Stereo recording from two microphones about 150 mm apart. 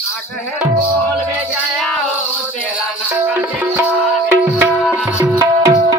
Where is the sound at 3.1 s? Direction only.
10° right (ahead or behind).